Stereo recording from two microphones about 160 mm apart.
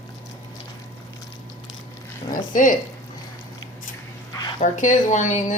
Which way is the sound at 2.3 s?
55° left (ahead or behind).